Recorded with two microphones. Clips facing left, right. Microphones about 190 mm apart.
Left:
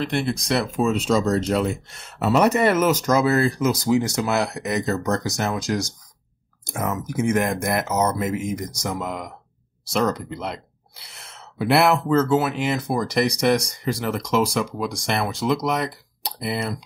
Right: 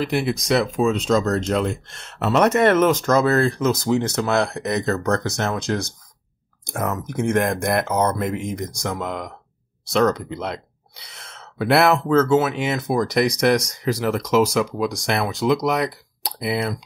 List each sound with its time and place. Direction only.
0.0 s speech: 5° right (ahead or behind)